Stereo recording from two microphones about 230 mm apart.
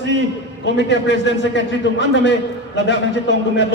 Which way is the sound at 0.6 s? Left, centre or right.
Left.